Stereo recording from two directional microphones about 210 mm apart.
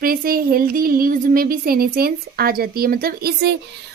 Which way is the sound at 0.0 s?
45° right (ahead or behind).